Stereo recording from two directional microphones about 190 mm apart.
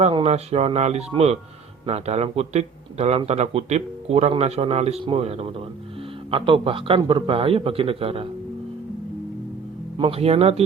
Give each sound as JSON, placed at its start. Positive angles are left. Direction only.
{"t": 0.0, "sound": "a man's voice", "side_deg": -30}
{"t": 10.0, "sound": "speech", "side_deg": -30}